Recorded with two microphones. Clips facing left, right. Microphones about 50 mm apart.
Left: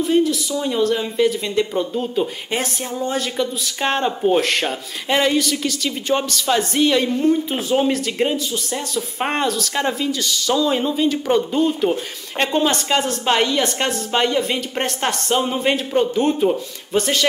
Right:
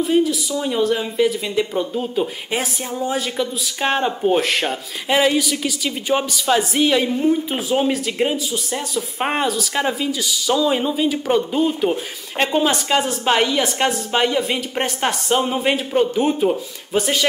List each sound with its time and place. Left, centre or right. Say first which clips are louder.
0.0 s speech: even; centre